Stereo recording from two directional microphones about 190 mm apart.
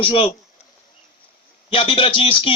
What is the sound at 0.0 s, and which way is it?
Speech, 30° left (ahead or behind).